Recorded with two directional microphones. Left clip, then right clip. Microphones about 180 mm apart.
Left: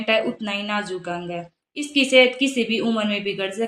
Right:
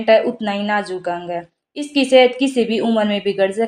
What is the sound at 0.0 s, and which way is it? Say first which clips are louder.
Speech: right 7 dB; 20° right (ahead or behind).